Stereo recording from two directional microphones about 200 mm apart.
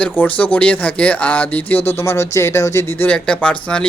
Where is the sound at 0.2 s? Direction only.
10° left (ahead or behind).